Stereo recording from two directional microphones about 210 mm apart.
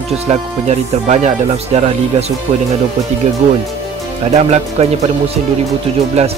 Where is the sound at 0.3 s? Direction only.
30° right (ahead or behind).